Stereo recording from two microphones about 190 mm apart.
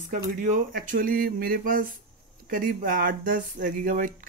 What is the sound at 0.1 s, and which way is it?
Speech, 45° right (ahead or behind).